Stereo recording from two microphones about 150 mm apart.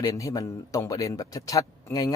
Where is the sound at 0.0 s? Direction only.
20° left (ahead or behind).